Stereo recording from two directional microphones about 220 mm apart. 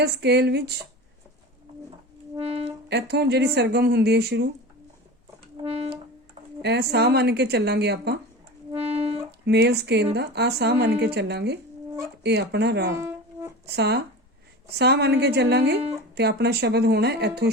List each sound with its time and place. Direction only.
0.0 s a woman's voice: 50° right (ahead or behind)
2.3 s music: 30° right (ahead or behind)
2.9 s a woman's voice: 50° right (ahead or behind)
5.6 s music: 30° right (ahead or behind)
6.6 s a woman's voice: 50° right (ahead or behind)
8.7 s music: 30° right (ahead or behind)
9.5 s a woman's voice: 50° right (ahead or behind)
13.0 s music: 10° right (ahead or behind)
13.7 s a woman's voice: 50° right (ahead or behind)